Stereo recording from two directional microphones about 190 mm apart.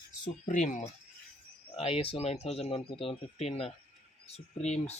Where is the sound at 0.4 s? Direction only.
40° left (ahead or behind).